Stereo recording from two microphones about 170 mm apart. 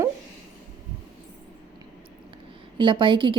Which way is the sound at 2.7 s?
30° right (ahead or behind).